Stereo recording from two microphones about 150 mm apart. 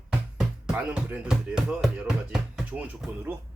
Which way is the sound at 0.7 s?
10° right (ahead or behind).